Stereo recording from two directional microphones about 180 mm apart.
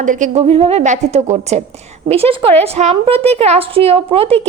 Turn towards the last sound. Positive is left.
turn(degrees=-30)  # may be behind; listen again after turning